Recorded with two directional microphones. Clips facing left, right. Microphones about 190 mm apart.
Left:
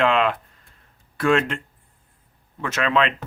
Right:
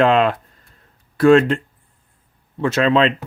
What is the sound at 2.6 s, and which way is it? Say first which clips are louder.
Speech: right 6 dB; 30° right (ahead or behind).